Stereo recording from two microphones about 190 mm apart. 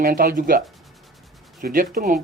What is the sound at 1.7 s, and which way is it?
Speech, 45° right (ahead or behind).